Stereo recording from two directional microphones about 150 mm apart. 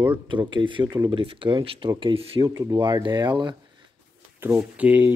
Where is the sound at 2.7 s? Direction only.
30° right (ahead or behind).